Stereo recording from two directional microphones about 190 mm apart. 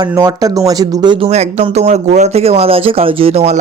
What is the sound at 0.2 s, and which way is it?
Speech, 20° right (ahead or behind).